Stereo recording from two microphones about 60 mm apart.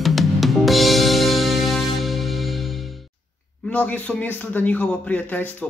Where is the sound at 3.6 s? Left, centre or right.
Left.